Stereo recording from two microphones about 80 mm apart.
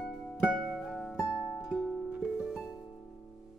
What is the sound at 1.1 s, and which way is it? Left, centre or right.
Music, left.